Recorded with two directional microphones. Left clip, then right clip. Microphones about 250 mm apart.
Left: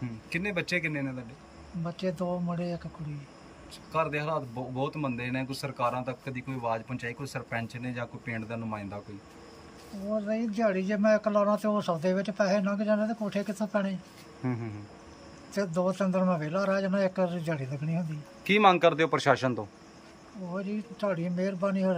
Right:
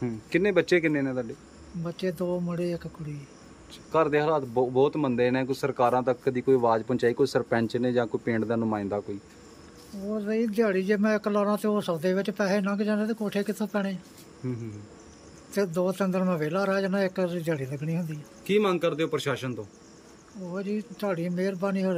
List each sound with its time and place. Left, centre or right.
0.0 s a man's voice: centre
1.9 s a man's voice: centre
3.9 s a man's voice: centre
10.1 s a man's voice: centre
14.4 s speech: centre
15.5 s a man's voice: centre
18.4 s speech: centre
20.5 s a man's voice: centre